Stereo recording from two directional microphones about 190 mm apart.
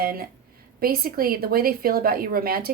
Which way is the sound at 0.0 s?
50° right (ahead or behind).